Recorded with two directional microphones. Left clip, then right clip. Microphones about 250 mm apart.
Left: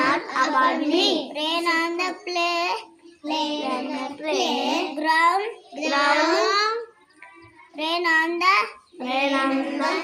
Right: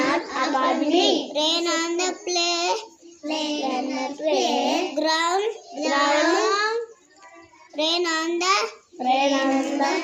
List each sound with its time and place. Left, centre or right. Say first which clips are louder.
0.0 s a sound: left 2 dB; centre
1.3 s child singing: right 1 dB; centre
7.8 s child singing: left 2 dB; centre